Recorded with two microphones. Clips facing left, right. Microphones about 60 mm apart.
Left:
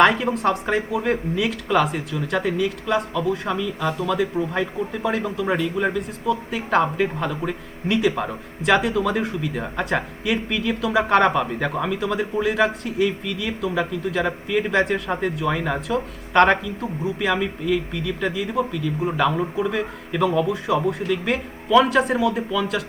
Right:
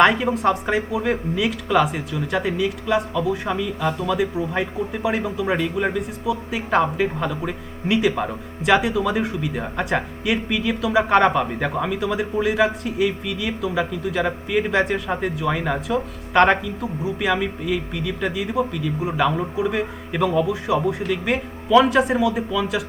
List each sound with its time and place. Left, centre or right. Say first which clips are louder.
0.0 s speech: right 1 dB; centre